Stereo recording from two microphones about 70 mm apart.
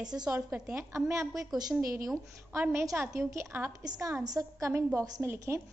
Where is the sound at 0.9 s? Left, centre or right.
Right.